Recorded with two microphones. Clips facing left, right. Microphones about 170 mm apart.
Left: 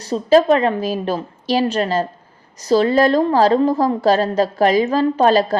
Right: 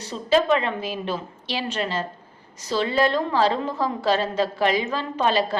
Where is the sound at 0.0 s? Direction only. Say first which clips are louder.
Left 7 dB; 40° left (ahead or behind).